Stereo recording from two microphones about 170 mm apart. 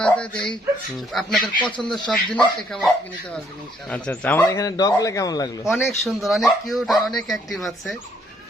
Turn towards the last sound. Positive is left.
turn(degrees=0)  # may be behind; listen again after turning